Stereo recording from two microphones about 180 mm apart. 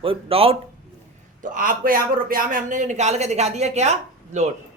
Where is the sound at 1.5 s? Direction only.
50° right (ahead or behind).